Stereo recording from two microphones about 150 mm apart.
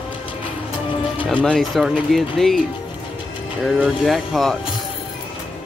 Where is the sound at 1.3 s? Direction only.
5° left (ahead or behind).